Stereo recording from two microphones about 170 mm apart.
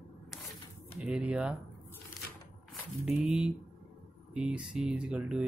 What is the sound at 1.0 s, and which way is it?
Speech, 5° right (ahead or behind).